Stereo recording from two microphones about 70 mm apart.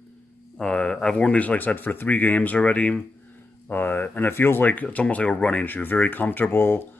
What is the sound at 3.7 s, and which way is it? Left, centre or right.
Speech, left.